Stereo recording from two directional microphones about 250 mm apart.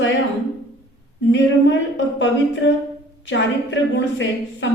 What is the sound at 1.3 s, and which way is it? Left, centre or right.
A woman's voice, left.